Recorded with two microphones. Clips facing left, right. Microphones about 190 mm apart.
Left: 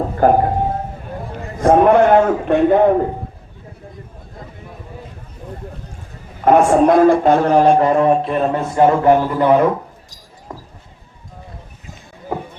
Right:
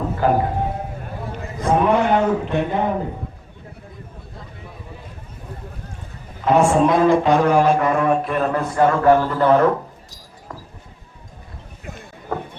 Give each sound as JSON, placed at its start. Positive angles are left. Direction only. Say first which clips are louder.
{"t": 0.2, "sound": "speech", "louder": "left 6 dB", "side_deg": 50}
{"t": 1.6, "sound": "a man's voice", "louder": "left 6 dB", "side_deg": 55}
{"t": 6.4, "sound": "a man's voice", "louder": "left 4 dB", "side_deg": 50}
{"t": 10.5, "sound": "basketball bounce", "louder": "left 3 dB", "side_deg": 25}